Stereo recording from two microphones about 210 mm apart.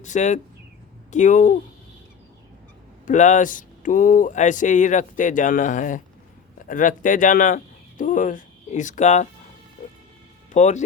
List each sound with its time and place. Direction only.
0.0 s speech: 35° left (ahead or behind)
3.1 s speech: 35° left (ahead or behind)
10.5 s speech: 35° left (ahead or behind)